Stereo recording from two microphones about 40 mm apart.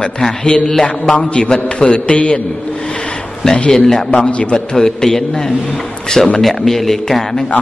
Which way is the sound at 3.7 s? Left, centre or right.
Centre.